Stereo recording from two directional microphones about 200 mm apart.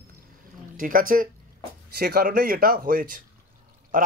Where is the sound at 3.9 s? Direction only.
45° right (ahead or behind).